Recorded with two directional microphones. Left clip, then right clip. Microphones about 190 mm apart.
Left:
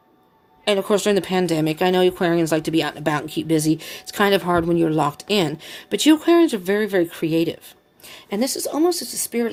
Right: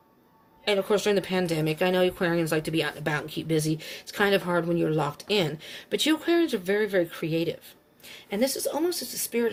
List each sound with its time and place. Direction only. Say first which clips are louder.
0.6 s speech: left 5 dB; 55° left (ahead or behind)